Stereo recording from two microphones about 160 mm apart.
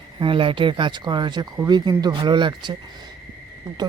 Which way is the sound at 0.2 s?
30° right (ahead or behind).